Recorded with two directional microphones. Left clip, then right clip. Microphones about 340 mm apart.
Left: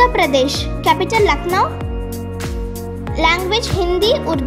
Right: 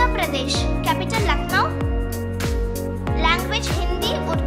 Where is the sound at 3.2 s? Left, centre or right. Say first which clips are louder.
Left 6 dB; centre.